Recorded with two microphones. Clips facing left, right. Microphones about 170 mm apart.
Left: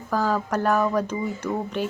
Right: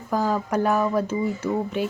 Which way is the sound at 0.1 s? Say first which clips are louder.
Right 1 dB; 10° right (ahead or behind).